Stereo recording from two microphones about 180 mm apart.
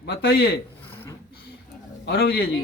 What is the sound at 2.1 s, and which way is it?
Speech, 60° left (ahead or behind).